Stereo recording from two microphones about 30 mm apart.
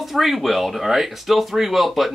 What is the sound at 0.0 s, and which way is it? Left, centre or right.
Speech, centre.